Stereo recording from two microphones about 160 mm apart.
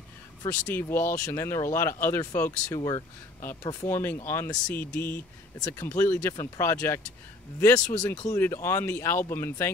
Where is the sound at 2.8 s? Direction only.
30° left (ahead or behind).